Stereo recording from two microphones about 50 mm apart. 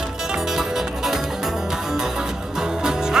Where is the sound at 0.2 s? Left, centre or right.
Centre.